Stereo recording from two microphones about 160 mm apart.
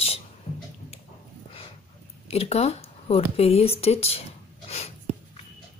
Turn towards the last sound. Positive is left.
turn(degrees=40)  # may be behind; listen again after turning